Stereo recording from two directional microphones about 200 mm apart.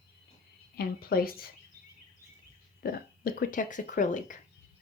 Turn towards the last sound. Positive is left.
turn(degrees=40)  # may be behind; listen again after turning